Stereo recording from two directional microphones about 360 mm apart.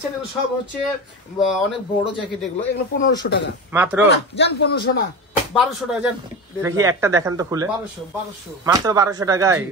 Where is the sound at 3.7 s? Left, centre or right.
Centre.